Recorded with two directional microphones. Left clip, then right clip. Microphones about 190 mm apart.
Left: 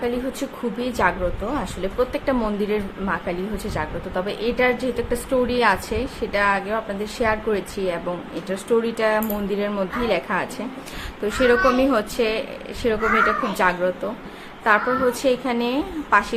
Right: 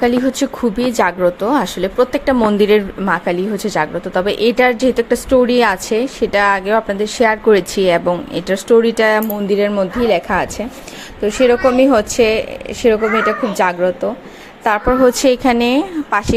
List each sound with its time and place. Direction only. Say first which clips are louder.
0.0 s speech: right 10 dB; 45° right (ahead or behind)
15.2 s a woman's voice: right 8 dB; 45° right (ahead or behind)